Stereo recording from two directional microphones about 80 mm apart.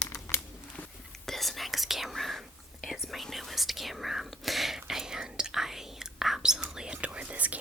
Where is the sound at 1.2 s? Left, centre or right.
Centre.